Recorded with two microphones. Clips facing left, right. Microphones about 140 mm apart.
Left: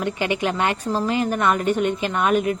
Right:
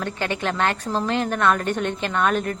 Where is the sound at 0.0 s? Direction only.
15° left (ahead or behind).